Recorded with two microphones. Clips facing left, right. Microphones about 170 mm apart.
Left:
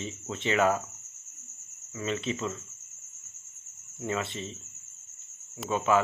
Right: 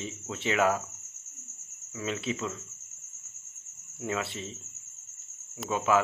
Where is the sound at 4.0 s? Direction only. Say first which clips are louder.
Left 1 dB; 5° right (ahead or behind).